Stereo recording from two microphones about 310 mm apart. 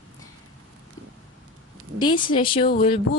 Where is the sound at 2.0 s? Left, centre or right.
Centre.